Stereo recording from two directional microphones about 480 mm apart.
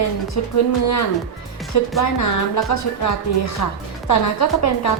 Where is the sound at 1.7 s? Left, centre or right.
Left.